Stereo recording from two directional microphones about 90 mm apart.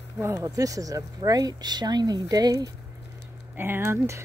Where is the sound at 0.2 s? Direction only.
30° right (ahead or behind).